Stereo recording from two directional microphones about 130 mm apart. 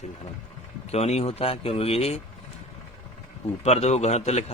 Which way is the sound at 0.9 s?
55° left (ahead or behind).